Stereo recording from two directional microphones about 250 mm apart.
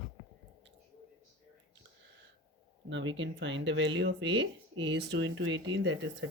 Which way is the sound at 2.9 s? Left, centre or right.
Right.